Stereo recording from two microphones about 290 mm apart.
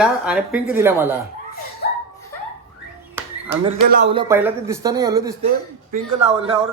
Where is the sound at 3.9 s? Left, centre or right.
Right.